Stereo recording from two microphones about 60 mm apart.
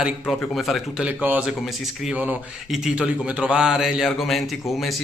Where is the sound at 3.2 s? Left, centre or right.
Right.